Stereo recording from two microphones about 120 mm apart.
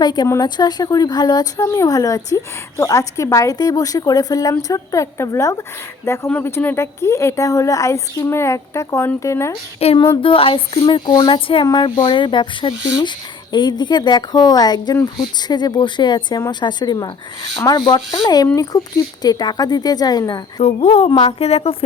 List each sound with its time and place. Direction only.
0.0 s speech: 35° left (ahead or behind)
9.8 s a woman's voice: 60° left (ahead or behind)
10.2 s speech: 50° left (ahead or behind)
11.6 s speech: 35° left (ahead or behind)
20.6 s a woman's voice: 60° left (ahead or behind)